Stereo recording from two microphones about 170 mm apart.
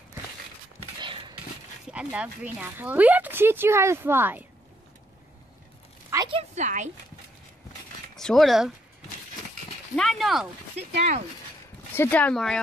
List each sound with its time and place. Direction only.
1.0 s a sound: 30° right (ahead or behind)
1.9 s speech: 5° right (ahead or behind)
6.0 s a sound: 20° right (ahead or behind)
6.3 s a woman's voice: 45° right (ahead or behind)
8.2 s speech: centre (ahead or behind)
9.9 s speech: centre (ahead or behind)
11.9 s speech: 10° left (ahead or behind)